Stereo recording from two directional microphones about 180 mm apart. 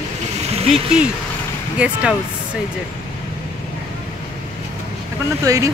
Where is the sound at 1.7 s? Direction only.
5° right (ahead or behind).